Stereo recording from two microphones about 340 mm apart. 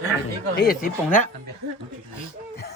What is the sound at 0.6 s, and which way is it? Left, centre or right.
Speech, left.